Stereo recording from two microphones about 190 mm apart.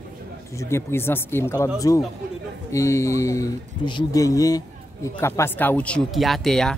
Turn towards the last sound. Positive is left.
turn(degrees=0)  # may be behind; listen again after turning